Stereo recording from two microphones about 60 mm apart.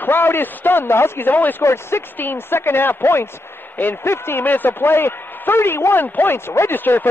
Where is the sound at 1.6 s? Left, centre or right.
Left.